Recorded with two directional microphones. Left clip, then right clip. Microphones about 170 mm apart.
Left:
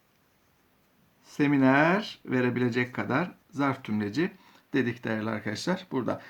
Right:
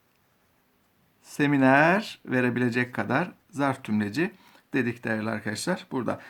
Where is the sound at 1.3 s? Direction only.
30° right (ahead or behind).